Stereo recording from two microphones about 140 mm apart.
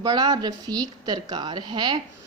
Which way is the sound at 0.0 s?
30° right (ahead or behind).